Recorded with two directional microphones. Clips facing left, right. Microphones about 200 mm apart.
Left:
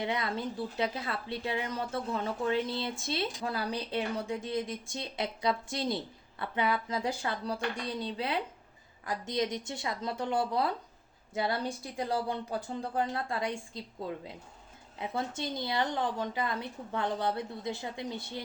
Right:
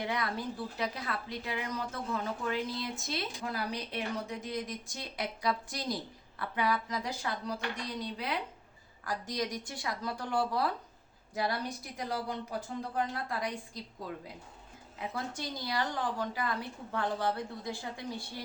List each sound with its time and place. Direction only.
0.0 s a woman's voice: 25° left (ahead or behind)
14.9 s a woman's voice: 25° left (ahead or behind)